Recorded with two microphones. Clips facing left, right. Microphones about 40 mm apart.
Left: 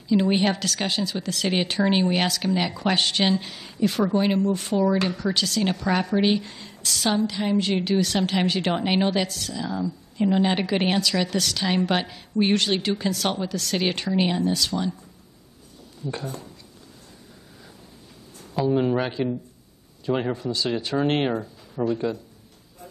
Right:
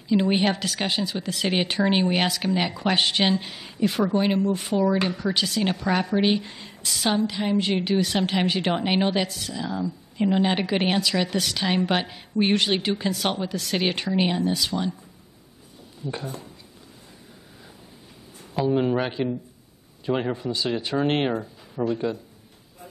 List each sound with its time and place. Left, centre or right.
0.1 s a woman's voice: centre
10.4 s a woman's voice: centre
16.0 s a woman's voice: centre
18.5 s a woman's voice: centre
20.3 s a woman's voice: centre